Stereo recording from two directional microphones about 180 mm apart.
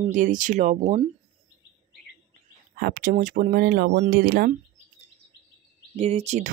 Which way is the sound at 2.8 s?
55° right (ahead or behind).